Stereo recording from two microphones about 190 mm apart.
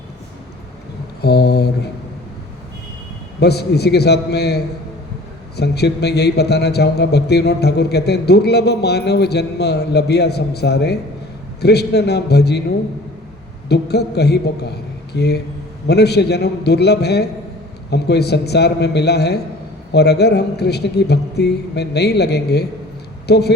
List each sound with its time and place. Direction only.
1.2 s a man's voice: 55° left (ahead or behind)
3.4 s a man's voice: 60° left (ahead or behind)
13.7 s a man's voice: 60° left (ahead or behind)